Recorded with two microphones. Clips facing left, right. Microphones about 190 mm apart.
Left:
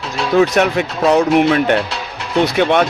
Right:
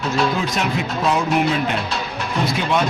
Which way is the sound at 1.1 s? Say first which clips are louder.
Left 7 dB; 70° left (ahead or behind).